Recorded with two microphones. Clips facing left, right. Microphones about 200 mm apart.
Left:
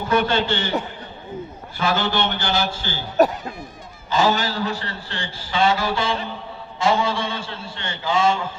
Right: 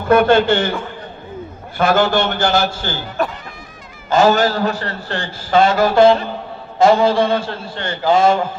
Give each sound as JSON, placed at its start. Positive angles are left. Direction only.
{"t": 0.1, "sound": "a man's voice", "side_deg": -55}
{"t": 1.8, "sound": "a man's voice", "side_deg": -50}
{"t": 3.2, "sound": "speech", "side_deg": 40}
{"t": 4.1, "sound": "a man's voice", "side_deg": -45}
{"t": 8.1, "sound": "a man's voice", "side_deg": -60}